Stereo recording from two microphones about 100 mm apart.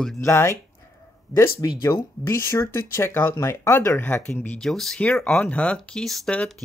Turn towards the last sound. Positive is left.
turn(degrees=5)  # may be behind; listen again after turning